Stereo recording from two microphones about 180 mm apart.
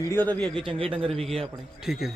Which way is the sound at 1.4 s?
Centre (ahead or behind).